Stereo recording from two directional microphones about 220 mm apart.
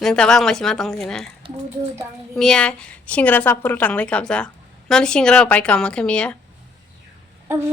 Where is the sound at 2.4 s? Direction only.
5° left (ahead or behind).